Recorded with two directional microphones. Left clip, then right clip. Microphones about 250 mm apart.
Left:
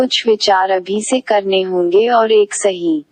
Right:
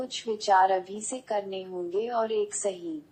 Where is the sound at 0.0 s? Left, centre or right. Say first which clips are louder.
Left 18 dB; left.